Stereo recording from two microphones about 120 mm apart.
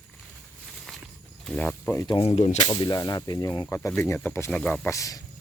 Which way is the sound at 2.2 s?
60° left (ahead or behind).